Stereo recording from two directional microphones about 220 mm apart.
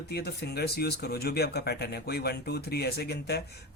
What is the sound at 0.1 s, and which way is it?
Speech, 45° left (ahead or behind).